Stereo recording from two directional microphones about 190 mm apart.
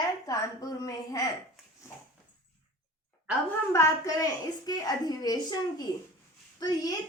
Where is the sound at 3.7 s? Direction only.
15° left (ahead or behind).